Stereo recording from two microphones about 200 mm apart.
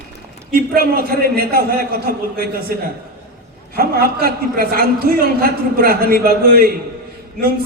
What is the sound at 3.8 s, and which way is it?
A man's voice, 50° right (ahead or behind).